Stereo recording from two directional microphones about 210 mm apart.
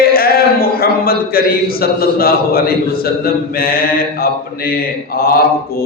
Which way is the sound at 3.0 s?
45° left (ahead or behind).